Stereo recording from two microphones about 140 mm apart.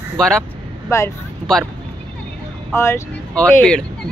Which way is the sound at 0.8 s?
20° left (ahead or behind).